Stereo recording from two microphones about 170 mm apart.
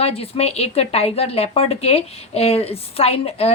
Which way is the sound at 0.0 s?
35° left (ahead or behind).